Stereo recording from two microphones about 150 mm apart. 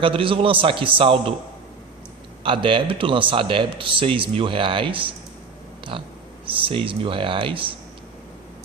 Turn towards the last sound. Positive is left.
turn(degrees=-35)  # may be behind; listen again after turning